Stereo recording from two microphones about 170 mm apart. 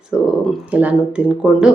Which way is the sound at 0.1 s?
5° right (ahead or behind).